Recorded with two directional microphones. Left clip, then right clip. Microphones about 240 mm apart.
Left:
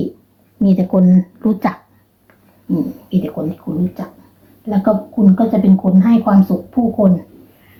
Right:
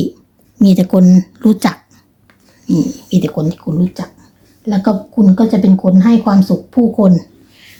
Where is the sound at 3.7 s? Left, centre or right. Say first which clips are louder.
Right 3 dB; right.